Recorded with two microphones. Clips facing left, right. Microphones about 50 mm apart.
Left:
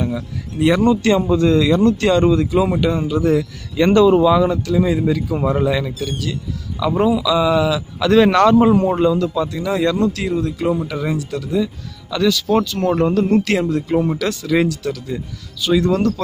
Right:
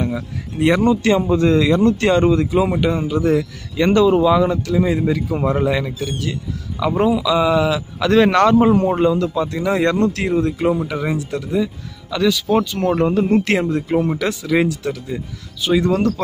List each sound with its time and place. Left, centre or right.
0.6 s a man's voice: right
10.7 s a man's voice: centre
13.4 s a man's voice: right
14.1 s a man's voice: centre